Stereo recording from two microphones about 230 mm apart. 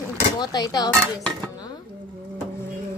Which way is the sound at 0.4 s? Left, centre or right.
Centre.